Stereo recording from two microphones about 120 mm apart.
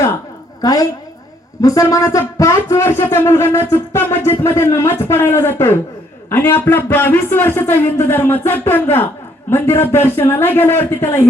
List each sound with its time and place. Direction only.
0.6 s a woman's voice: 30° left (ahead or behind)